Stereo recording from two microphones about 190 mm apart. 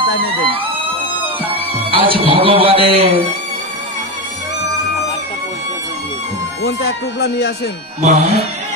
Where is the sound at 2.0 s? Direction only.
30° right (ahead or behind).